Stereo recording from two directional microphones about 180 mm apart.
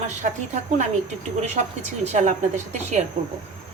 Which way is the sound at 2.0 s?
40° right (ahead or behind).